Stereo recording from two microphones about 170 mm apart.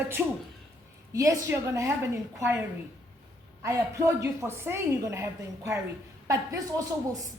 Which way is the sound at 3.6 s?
20° right (ahead or behind).